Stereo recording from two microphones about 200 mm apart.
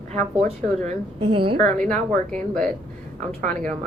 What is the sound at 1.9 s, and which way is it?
Speech, 5° left (ahead or behind).